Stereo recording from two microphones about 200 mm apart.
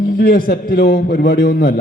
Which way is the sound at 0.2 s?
50° left (ahead or behind).